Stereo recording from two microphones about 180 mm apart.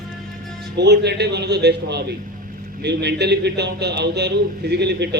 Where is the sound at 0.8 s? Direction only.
70° right (ahead or behind).